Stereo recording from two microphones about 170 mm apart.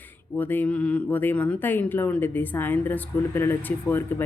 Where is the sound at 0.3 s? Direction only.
10° left (ahead or behind).